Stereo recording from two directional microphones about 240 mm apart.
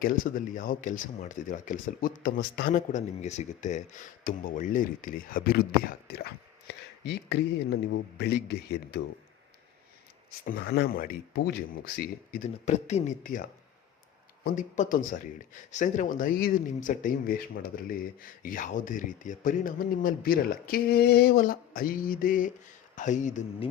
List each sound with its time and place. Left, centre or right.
0.0 s speech: left
10.4 s speech: left
14.4 s speech: left